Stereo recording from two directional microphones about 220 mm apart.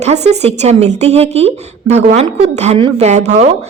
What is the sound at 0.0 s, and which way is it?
Speech, 30° right (ahead or behind).